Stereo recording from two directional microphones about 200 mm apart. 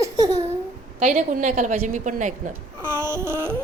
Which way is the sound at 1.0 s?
35° right (ahead or behind).